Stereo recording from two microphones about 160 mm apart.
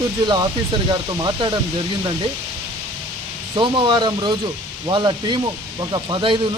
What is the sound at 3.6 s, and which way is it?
Speech, 30° right (ahead or behind).